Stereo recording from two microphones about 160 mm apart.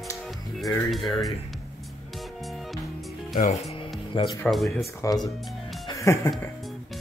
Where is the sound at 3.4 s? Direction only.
45° left (ahead or behind).